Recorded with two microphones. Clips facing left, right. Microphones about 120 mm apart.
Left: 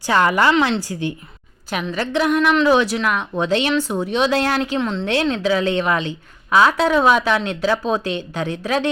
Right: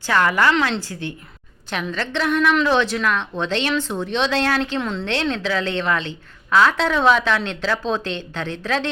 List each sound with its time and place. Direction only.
0.0 s a woman's voice: 20° left (ahead or behind); by 5.0 s centre (ahead or behind)
5.0 s a woman's voice: 10° left (ahead or behind)